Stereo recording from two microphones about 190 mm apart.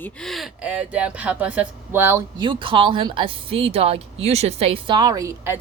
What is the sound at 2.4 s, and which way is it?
A woman's voice, 25° right (ahead or behind).